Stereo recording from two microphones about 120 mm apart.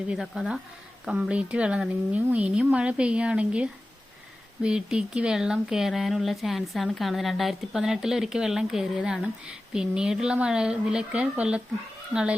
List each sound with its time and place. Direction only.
0.1 s speech: 5° right (ahead or behind)